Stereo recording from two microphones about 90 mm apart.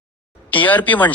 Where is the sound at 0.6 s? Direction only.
20° left (ahead or behind).